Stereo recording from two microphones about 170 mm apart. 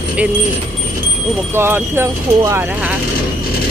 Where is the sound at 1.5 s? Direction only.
15° right (ahead or behind).